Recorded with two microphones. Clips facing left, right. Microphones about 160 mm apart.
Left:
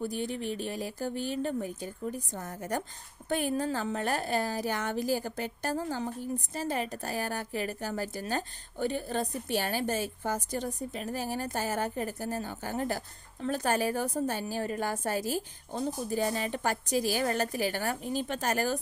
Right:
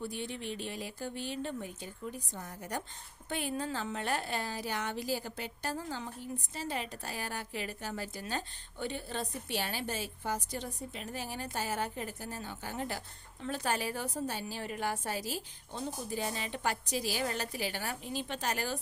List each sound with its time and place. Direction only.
0.0 s a woman's voice: 40° left (ahead or behind)